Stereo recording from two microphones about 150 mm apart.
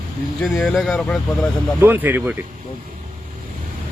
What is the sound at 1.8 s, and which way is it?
Speech, 15° right (ahead or behind).